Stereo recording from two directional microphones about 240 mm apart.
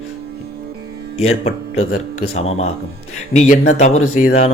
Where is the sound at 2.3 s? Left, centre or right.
Left.